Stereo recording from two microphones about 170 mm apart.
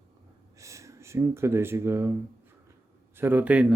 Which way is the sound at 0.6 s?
20° right (ahead or behind).